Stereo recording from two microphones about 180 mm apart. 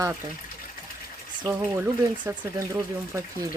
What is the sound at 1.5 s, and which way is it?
Speech, 10° right (ahead or behind).